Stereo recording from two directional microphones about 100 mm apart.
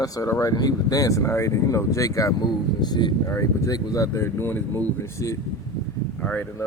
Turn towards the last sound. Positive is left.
turn(degrees=15)  # may be behind; listen again after turning